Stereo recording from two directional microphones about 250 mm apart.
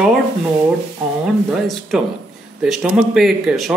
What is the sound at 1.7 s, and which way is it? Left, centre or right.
Speech, centre.